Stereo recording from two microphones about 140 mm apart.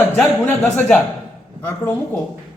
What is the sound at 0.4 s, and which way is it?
Speech, 10° left (ahead or behind).